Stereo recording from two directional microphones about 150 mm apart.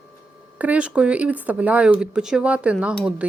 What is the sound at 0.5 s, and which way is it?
Speech, 10° right (ahead or behind).